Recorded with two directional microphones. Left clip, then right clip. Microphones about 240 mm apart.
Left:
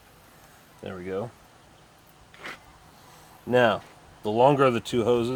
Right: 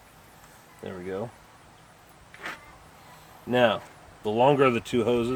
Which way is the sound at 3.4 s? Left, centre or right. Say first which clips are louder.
Left 1 dB; left.